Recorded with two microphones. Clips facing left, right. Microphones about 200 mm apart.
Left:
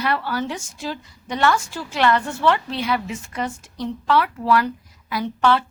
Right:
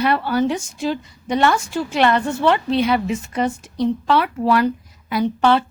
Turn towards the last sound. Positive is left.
turn(degrees=-20)  # may be behind; listen again after turning